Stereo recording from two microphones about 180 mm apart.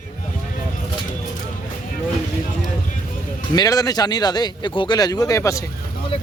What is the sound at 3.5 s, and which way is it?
Speech, 20° left (ahead or behind).